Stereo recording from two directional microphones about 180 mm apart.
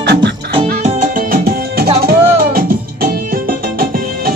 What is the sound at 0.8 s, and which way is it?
Music, 45° right (ahead or behind).